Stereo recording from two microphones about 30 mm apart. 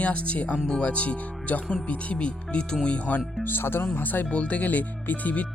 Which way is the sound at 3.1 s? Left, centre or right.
Left.